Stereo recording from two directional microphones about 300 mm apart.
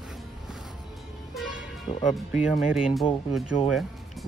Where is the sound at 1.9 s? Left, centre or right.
Centre.